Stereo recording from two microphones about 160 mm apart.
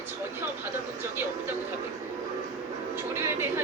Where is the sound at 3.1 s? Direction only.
15° right (ahead or behind).